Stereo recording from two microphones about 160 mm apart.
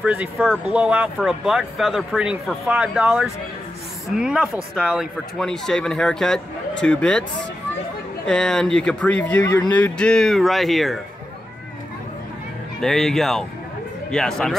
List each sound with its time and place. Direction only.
0.0 s speech: 10° right (ahead or behind)
8.3 s speech: 5° left (ahead or behind)
9.4 s speech: 20° left (ahead or behind)
9.7 s speech: 10° left (ahead or behind)
12.8 s speech: centre (ahead or behind)